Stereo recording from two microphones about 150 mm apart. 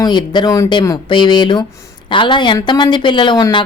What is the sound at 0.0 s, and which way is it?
A woman's voice, 30° left (ahead or behind).